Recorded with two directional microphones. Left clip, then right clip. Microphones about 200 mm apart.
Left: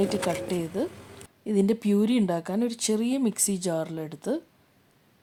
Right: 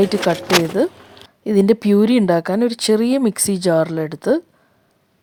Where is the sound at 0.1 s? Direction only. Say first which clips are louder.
Right 12 dB; 35° right (ahead or behind).